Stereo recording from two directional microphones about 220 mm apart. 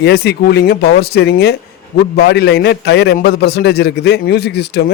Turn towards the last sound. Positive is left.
turn(degrees=50)  # may be behind; listen again after turning